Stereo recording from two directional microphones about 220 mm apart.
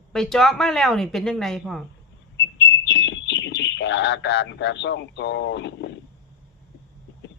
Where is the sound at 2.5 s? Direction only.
55° left (ahead or behind).